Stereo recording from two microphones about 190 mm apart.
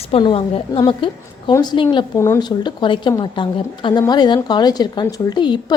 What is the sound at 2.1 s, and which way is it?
A woman's voice, 15° left (ahead or behind).